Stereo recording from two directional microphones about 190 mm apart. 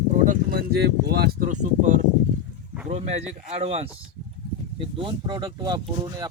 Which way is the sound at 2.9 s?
35° right (ahead or behind).